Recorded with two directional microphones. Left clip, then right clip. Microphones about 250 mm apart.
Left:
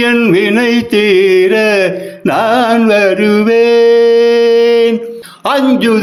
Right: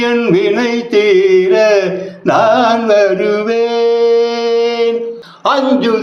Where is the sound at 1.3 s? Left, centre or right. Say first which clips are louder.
Even; left.